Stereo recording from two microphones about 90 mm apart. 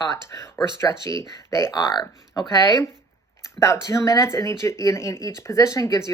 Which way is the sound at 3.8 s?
40° left (ahead or behind).